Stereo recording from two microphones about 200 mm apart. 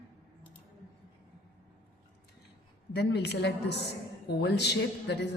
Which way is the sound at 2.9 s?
55° left (ahead or behind).